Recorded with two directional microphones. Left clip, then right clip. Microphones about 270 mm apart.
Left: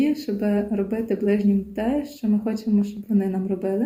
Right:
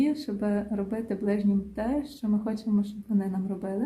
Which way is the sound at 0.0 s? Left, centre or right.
Centre.